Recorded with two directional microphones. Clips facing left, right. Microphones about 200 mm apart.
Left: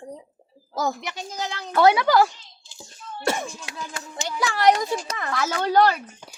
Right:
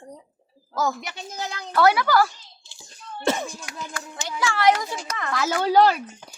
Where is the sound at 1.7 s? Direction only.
20° left (ahead or behind).